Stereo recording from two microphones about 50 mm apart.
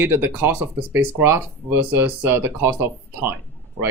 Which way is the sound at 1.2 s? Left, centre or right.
Right.